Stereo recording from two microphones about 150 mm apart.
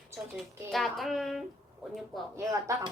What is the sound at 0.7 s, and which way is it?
Speech, centre (ahead or behind).